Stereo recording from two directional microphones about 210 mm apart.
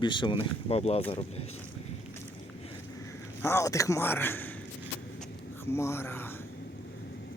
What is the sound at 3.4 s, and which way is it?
A man's voice, 15° left (ahead or behind).